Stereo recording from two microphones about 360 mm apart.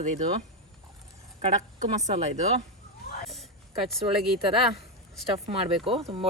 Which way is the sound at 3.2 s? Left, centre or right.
Centre.